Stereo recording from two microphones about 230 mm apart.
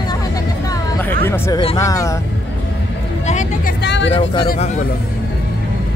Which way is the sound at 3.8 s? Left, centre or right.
Left.